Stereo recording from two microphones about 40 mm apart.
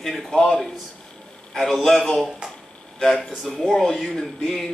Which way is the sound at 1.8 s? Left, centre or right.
Centre.